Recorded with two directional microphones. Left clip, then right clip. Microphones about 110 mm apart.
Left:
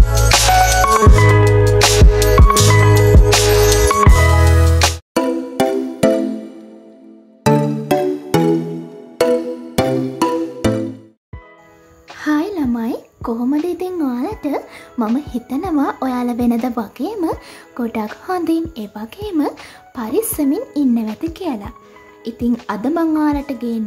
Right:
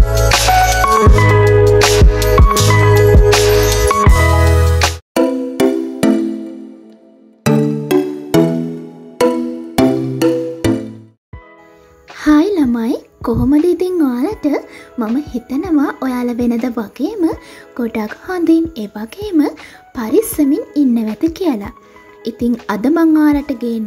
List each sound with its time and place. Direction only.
0.0 s music: 10° left (ahead or behind)
7.4 s music: centre (ahead or behind)
12.2 s music: 35° right (ahead or behind)
15.1 s a sound: 15° right (ahead or behind)
16.6 s a child's voice: 15° right (ahead or behind)
21.2 s a child's voice: 30° right (ahead or behind)